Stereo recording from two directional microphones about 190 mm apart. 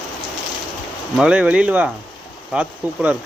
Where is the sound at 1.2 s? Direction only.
5° right (ahead or behind).